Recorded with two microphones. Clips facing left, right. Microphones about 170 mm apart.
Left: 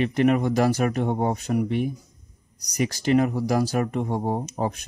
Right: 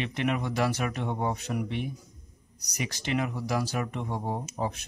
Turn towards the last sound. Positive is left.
turn(degrees=50)  # may be behind; listen again after turning